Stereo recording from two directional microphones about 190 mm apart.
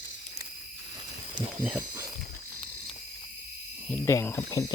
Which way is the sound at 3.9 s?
15° left (ahead or behind).